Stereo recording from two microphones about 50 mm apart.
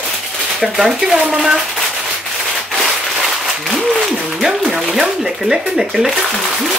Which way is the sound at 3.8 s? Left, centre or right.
Centre.